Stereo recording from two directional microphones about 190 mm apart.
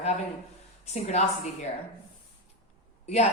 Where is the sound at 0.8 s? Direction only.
35° left (ahead or behind).